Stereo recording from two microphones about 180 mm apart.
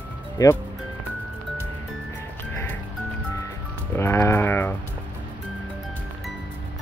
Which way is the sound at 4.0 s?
15° left (ahead or behind).